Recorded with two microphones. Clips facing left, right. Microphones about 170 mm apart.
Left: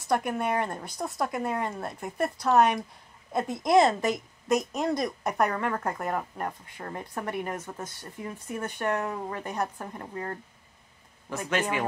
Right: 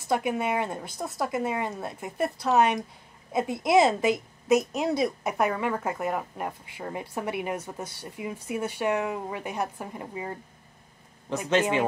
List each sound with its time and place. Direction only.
0.1 s a woman's voice: 5° right (ahead or behind)
11.2 s speech: 20° right (ahead or behind)